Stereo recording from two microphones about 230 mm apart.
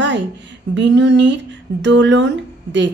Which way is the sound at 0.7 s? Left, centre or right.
Right.